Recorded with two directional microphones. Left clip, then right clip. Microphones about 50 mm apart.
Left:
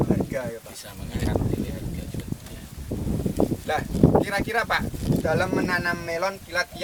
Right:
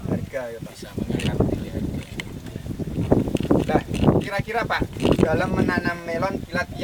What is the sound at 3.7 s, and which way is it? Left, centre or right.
Speech, left.